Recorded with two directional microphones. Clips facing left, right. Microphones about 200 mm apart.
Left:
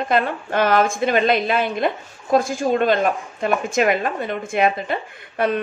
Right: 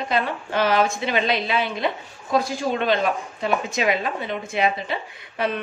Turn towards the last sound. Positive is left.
turn(degrees=50)  # may be behind; listen again after turning